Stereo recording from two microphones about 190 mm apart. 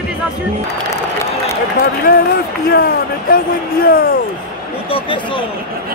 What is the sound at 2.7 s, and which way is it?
Speech, 55° left (ahead or behind).